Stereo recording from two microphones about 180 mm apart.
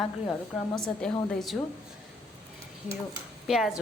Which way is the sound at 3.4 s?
Centre (ahead or behind).